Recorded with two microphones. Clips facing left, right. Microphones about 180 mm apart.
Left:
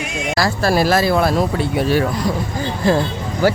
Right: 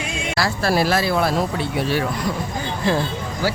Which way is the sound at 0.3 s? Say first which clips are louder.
Left 3 dB; 40° left (ahead or behind).